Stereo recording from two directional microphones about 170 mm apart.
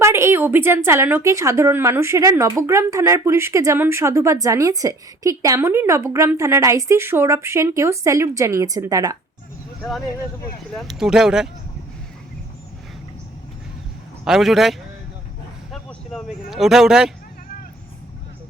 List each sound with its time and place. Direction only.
0.0 s a woman's voice: 15° right (ahead or behind)
10.8 s speech: centre (ahead or behind)
14.3 s speech: centre (ahead or behind)